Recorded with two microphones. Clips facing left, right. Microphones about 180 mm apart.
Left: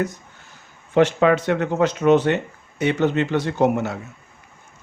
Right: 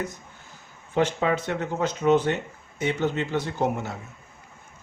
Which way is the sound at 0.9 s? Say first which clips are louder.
Left 7 dB; 75° left (ahead or behind).